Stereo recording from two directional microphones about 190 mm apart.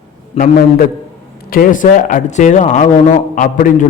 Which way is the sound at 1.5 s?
45° left (ahead or behind).